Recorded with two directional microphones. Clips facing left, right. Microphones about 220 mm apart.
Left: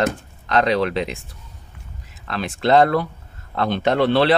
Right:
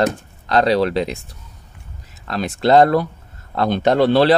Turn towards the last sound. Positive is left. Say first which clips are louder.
# right 3 dB
turn(degrees=-40)  # may be behind; listen again after turning